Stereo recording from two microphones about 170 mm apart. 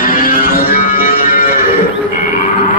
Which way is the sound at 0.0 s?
55° left (ahead or behind).